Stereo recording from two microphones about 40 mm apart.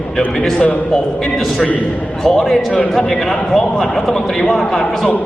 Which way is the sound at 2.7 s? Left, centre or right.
Left.